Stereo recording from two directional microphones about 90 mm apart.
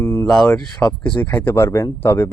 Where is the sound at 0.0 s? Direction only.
25° left (ahead or behind).